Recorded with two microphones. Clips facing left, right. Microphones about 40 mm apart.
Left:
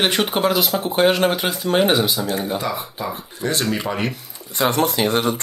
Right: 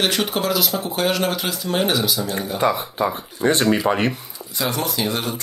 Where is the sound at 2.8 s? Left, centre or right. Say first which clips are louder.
Right 5 dB; centre.